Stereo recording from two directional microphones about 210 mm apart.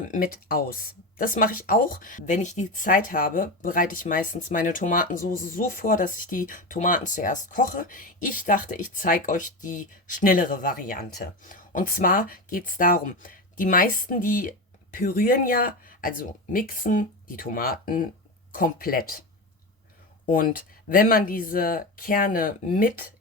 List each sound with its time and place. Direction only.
0.1 s speech: 45° left (ahead or behind)
20.2 s speech: 40° left (ahead or behind)